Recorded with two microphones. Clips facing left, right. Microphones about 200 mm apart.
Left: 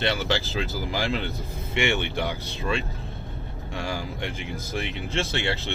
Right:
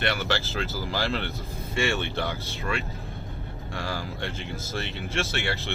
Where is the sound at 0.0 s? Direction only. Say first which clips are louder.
Left 2 dB; 20° left (ahead or behind).